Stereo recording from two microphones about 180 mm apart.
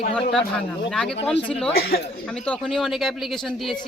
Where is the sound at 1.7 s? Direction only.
55° left (ahead or behind).